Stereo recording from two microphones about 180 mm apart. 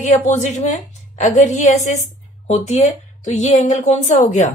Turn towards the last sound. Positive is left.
turn(degrees=40)  # may be behind; listen again after turning